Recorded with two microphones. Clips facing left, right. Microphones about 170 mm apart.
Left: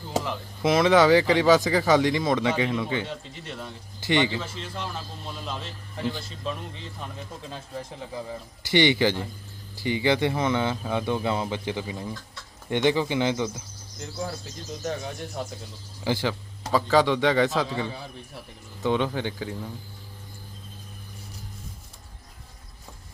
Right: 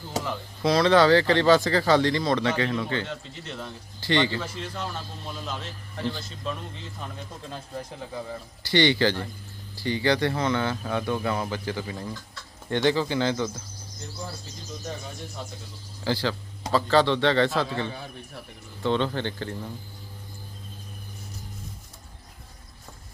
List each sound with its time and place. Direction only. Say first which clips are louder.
0.6 s speech: even; 20° left (ahead or behind)
4.4 s a man's voice: right 1 dB; centre (ahead or behind)
8.7 s speech: left 1 dB; 20° left (ahead or behind)
16.0 s a man's voice: even; 15° left (ahead or behind)